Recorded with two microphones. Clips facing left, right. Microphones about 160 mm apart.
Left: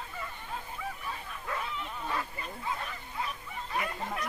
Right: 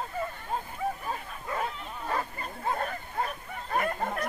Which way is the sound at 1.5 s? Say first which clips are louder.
Right 5 dB; 45° right (ahead or behind).